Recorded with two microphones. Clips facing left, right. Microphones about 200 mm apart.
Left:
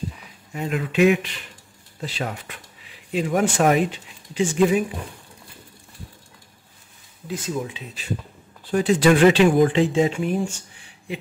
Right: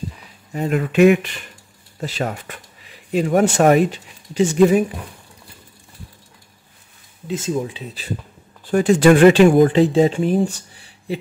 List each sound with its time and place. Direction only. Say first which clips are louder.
0.5 s speech: right 5 dB; 40° right (ahead or behind)
7.2 s speech: right 5 dB; 25° right (ahead or behind)
8.6 s speech: right 4 dB; 45° right (ahead or behind)